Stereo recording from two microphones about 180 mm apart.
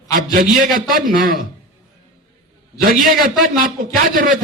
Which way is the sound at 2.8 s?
50° right (ahead or behind).